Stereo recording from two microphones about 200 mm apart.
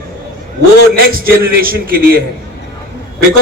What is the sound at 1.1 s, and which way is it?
A man's voice, 45° right (ahead or behind).